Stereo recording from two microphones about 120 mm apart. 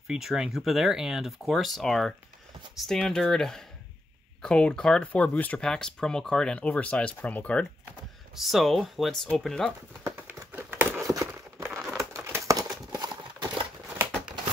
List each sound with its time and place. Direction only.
0.1 s speech: 5° right (ahead or behind)
8.4 s speech: centre (ahead or behind)
10.0 s crumpling: 15° right (ahead or behind)
11.1 s a sound: 25° right (ahead or behind)
12.0 s crumpling: 25° right (ahead or behind)